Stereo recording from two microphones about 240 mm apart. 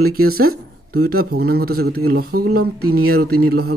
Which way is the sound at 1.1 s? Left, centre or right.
Right.